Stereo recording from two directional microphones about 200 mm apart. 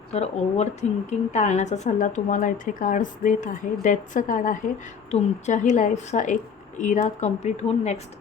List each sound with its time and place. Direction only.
0.1 s a woman's voice: 35° left (ahead or behind)